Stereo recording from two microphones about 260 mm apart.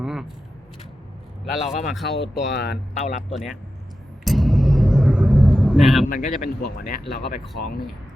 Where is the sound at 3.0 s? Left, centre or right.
Left.